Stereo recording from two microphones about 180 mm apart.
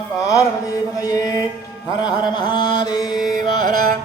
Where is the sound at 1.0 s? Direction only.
20° left (ahead or behind).